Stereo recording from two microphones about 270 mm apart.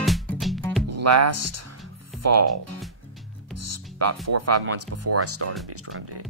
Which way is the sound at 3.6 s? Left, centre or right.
Right.